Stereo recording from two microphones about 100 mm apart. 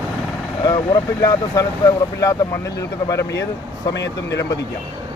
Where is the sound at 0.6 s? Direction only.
40° left (ahead or behind).